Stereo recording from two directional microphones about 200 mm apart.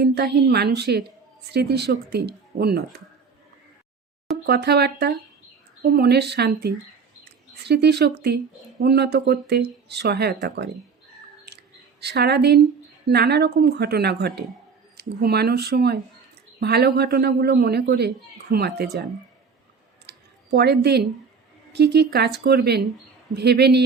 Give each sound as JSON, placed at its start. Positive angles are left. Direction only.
{"t": 0.0, "sound": "speech", "side_deg": -55}
{"t": 4.4, "sound": "a man's voice", "side_deg": -55}
{"t": 11.4, "sound": "squish", "side_deg": -55}
{"t": 13.1, "sound": "a man's voice", "side_deg": -55}
{"t": 20.1, "sound": "a sound", "side_deg": -55}
{"t": 21.7, "sound": "a man's voice", "side_deg": -55}